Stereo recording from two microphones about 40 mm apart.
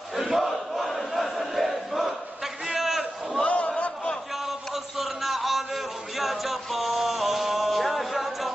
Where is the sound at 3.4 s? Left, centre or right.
Left.